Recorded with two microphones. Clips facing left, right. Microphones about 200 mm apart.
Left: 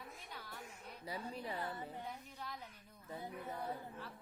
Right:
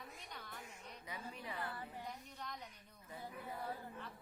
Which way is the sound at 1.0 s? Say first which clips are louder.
Left 5 dB; 35° left (ahead or behind).